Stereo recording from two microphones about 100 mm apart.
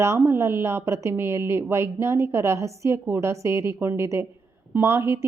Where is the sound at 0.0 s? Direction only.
30° right (ahead or behind).